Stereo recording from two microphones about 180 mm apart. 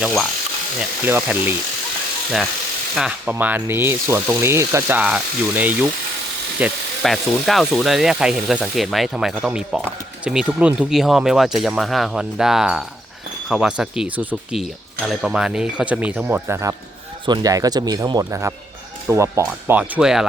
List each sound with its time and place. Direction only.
0.0 s speech: centre (ahead or behind)
2.9 s speech: 5° right (ahead or behind)